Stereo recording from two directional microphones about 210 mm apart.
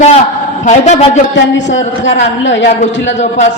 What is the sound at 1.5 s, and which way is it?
A man's voice, 60° left (ahead or behind).